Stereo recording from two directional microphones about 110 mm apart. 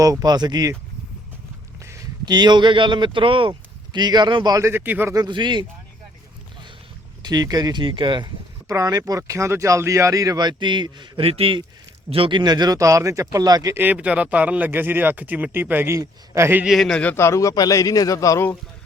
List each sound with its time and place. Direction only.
0.0 s speech: 35° right (ahead or behind)
2.2 s speech: 40° right (ahead or behind)
4.5 s a man's voice: 25° right (ahead or behind)
5.1 s speech: 40° right (ahead or behind)
7.2 s speech: 40° right (ahead or behind)
8.7 s speech: 30° right (ahead or behind)
11.3 s speech: 55° right (ahead or behind); by 13.7 s 35° right (ahead or behind)
13.7 s a man's voice: 15° right (ahead or behind)
16.6 s a man's voice: 5° left (ahead or behind)
17.2 s a man's voice: 25° left (ahead or behind)